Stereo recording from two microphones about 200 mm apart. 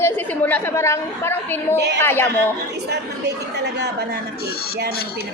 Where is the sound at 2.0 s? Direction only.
10° left (ahead or behind).